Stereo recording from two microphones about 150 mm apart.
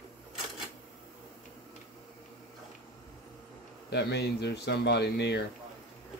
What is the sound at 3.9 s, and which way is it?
Speech, 90° left.